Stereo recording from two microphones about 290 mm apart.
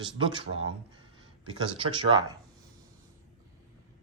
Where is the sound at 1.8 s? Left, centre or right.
Centre.